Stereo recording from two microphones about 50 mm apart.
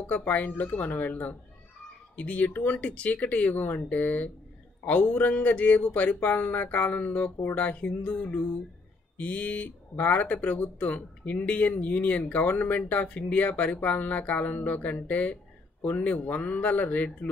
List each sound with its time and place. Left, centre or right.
0.0 s speech: left
9.2 s speech: left